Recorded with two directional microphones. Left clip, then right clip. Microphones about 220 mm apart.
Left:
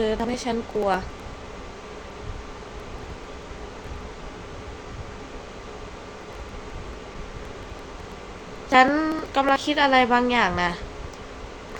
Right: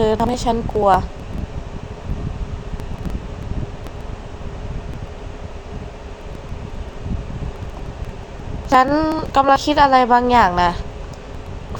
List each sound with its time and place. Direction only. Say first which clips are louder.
0.0 s a woman's voice: right 8 dB; 15° right (ahead or behind)
8.7 s a woman's voice: right 4 dB; 15° right (ahead or behind)